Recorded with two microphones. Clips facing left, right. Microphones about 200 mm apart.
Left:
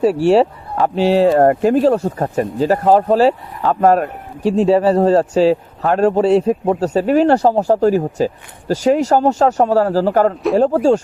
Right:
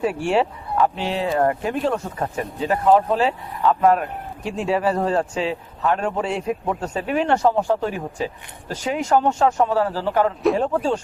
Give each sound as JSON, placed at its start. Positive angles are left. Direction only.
{"t": 0.0, "sound": "a man's voice", "side_deg": 35}